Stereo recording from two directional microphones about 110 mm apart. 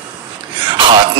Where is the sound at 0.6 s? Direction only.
45° right (ahead or behind).